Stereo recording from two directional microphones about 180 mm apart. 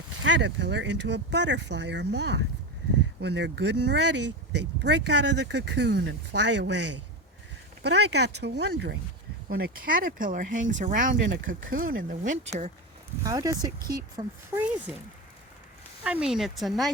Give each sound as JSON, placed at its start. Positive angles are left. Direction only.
{"t": 0.2, "sound": "speech", "side_deg": -90}
{"t": 13.2, "sound": "speech", "side_deg": -20}
{"t": 14.9, "sound": "speech", "side_deg": -5}
{"t": 16.0, "sound": "speech", "side_deg": -5}